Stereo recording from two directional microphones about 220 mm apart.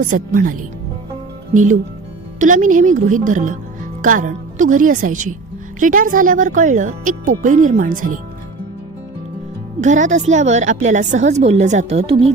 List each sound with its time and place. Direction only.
0.0 s a woman's voice: 35° right (ahead or behind)
9.8 s a woman's voice: 35° right (ahead or behind)